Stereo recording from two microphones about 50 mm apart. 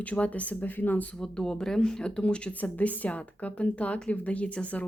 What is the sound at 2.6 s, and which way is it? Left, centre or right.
A woman's voice, left.